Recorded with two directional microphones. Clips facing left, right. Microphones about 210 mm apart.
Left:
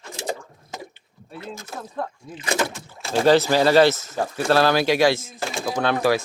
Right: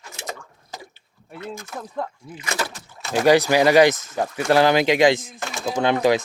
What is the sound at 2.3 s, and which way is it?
Speech, 30° left (ahead or behind).